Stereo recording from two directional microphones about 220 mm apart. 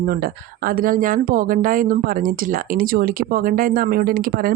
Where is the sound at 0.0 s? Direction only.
45° right (ahead or behind).